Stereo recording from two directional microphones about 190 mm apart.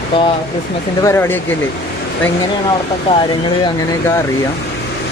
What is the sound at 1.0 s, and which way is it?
Speech, 10° left (ahead or behind).